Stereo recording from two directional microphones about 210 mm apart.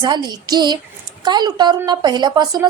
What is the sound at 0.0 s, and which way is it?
A woman's voice, 20° right (ahead or behind).